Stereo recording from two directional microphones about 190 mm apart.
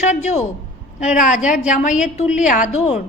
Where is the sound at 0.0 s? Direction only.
35° left (ahead or behind).